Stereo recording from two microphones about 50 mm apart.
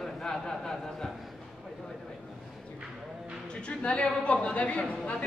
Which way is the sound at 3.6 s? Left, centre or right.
Left.